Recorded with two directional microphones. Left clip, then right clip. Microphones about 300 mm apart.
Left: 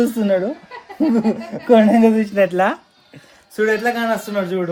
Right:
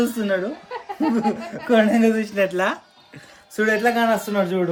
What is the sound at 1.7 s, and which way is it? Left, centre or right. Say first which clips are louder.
Speech: left 5 dB; centre.